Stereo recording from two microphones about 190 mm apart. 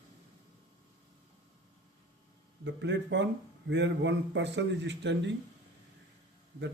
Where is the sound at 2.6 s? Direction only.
70° right (ahead or behind).